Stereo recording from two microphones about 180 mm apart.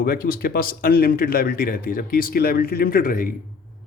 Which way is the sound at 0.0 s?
55° left (ahead or behind).